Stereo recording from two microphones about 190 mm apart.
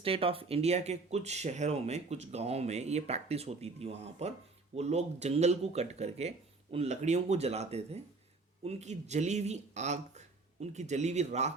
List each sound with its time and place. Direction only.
0.0 s speech: 30° right (ahead or behind)